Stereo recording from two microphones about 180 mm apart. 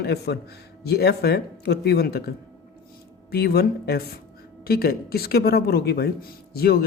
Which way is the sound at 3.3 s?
60° left (ahead or behind).